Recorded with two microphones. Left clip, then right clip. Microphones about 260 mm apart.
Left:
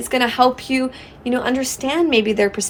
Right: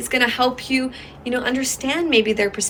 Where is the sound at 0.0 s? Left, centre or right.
Centre.